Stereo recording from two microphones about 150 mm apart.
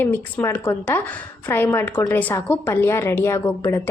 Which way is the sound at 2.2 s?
10° left (ahead or behind).